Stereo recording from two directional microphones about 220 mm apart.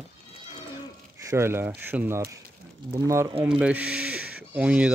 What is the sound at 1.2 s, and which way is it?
Speech, 10° right (ahead or behind).